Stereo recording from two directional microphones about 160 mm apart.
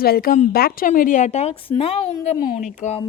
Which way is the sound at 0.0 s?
70° left (ahead or behind).